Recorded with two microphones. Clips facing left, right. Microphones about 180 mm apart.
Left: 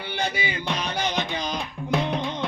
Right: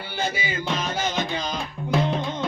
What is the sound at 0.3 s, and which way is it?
Music, 45° right (ahead or behind).